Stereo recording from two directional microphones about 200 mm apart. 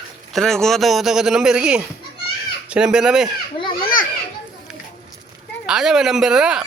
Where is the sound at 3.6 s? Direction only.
25° left (ahead or behind).